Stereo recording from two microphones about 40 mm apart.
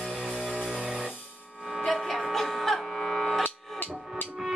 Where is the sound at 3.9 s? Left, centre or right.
Centre.